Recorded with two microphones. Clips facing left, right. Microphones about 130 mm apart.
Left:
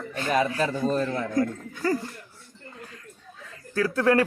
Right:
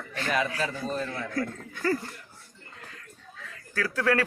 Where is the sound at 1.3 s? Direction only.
20° left (ahead or behind).